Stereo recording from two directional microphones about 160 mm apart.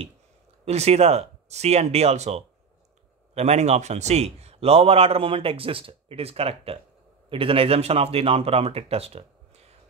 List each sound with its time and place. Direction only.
0.7 s a man's voice: 40° right (ahead or behind)